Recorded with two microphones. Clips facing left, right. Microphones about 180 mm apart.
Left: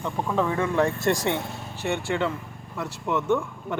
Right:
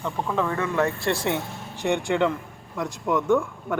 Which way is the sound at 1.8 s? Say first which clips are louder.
Right 4 dB; 15° right (ahead or behind).